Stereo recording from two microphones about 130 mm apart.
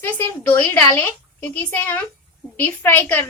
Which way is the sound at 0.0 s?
15° left (ahead or behind).